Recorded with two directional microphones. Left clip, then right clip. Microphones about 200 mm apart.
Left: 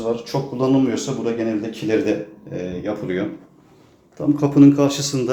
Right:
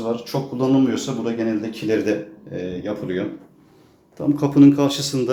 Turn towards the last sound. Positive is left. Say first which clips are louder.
# left 1 dB
turn(degrees=-5)  # may be behind; listen again after turning